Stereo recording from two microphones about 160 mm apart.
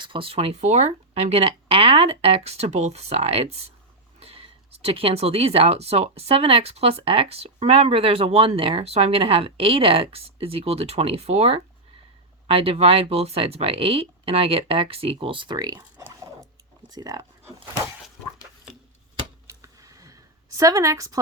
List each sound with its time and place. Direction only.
0.0 s a woman's voice: 35° right (ahead or behind)
19.5 s a sound: 20° right (ahead or behind)
20.6 s a woman's voice: 20° right (ahead or behind)